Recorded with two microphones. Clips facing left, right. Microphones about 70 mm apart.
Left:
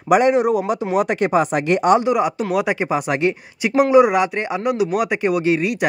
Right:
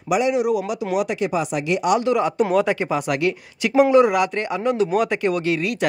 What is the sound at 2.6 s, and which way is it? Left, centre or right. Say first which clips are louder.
Speech: left 1 dB; centre.